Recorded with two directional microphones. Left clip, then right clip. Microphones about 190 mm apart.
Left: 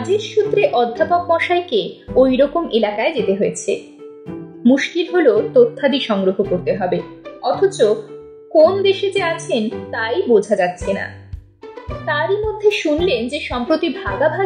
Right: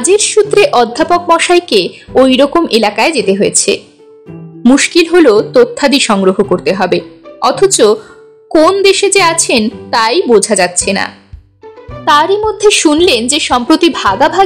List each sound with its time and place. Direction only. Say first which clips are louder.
0.2 s a woman's voice: right 8 dB; 40° right (ahead or behind)
12.1 s a woman's voice: right 10 dB; 35° right (ahead or behind)